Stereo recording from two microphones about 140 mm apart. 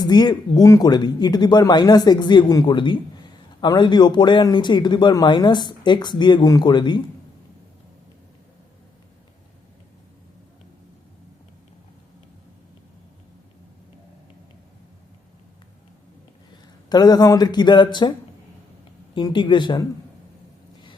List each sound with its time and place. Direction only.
0.0 s speech: 30° left (ahead or behind)
16.9 s speech: 30° left (ahead or behind)
19.1 s speech: 35° left (ahead or behind)